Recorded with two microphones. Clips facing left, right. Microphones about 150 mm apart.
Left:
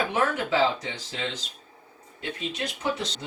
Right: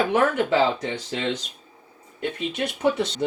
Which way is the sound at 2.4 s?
60° right (ahead or behind).